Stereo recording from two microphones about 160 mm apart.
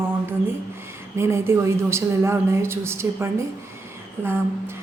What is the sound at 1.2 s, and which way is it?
A woman's voice, 15° right (ahead or behind).